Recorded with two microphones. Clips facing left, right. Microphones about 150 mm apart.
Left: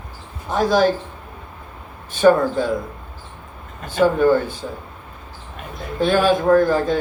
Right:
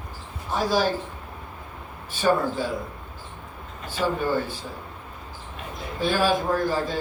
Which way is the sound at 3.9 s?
55° left (ahead or behind).